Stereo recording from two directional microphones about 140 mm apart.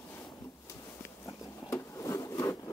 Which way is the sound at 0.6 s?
20° left (ahead or behind).